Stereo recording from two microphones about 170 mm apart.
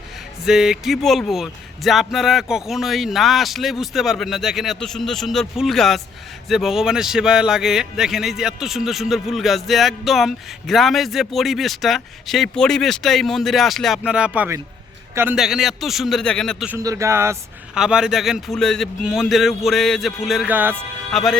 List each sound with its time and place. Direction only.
0.4 s a man's voice: 5° right (ahead or behind)
15.4 s speech: centre (ahead or behind)
16.6 s speech: 20° right (ahead or behind)
17.7 s speech: 5° right (ahead or behind)
21.1 s speech: centre (ahead or behind)